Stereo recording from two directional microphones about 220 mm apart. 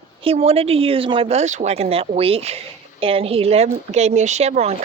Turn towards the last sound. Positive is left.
turn(degrees=-30)  # may be behind; listen again after turning